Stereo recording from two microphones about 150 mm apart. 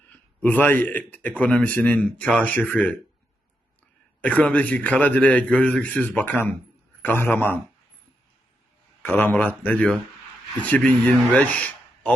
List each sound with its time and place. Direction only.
0.1 s a man's voice: 10° left (ahead or behind)
4.2 s a man's voice: 10° left (ahead or behind)
9.0 s a man's voice: 15° left (ahead or behind)